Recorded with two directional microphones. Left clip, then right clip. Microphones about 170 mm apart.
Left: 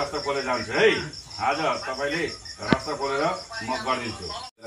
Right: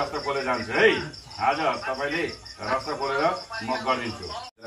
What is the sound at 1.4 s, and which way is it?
Cricket, 10° left (ahead or behind).